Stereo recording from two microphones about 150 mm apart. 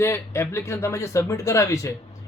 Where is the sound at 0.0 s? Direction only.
20° left (ahead or behind).